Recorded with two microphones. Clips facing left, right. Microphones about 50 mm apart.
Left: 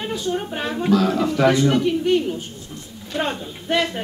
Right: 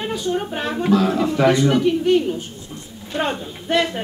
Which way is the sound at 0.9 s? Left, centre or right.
Centre.